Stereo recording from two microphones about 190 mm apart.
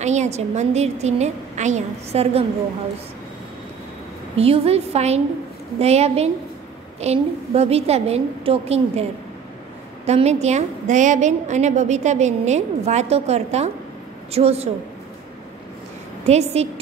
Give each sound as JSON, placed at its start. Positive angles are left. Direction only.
{"t": 0.0, "sound": "a woman's voice", "side_deg": -35}
{"t": 4.4, "sound": "a woman's voice", "side_deg": -30}
{"t": 10.0, "sound": "a woman's voice", "side_deg": -35}
{"t": 16.3, "sound": "a woman's voice", "side_deg": -35}